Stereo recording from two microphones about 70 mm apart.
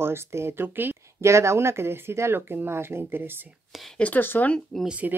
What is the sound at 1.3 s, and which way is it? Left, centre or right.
Speech, right.